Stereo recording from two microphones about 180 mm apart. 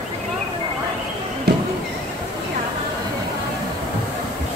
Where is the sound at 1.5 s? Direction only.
65° right (ahead or behind).